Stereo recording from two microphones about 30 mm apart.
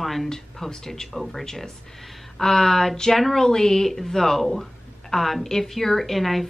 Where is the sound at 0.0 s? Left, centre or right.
Centre.